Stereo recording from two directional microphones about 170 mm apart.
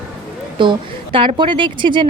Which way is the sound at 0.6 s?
30° right (ahead or behind).